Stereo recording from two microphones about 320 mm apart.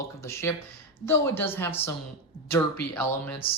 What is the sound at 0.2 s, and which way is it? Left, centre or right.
Speech, centre.